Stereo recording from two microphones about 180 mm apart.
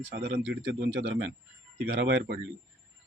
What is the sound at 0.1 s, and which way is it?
Speech, 85° right.